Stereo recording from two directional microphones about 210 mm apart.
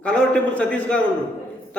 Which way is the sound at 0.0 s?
5° left (ahead or behind).